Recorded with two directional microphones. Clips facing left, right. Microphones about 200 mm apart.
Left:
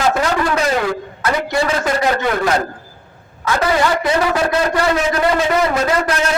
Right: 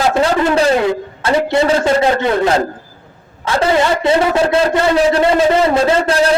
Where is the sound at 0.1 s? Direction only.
25° right (ahead or behind).